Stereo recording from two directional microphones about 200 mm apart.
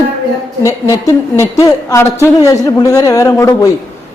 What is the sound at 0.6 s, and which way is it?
A woman's voice, 15° left (ahead or behind).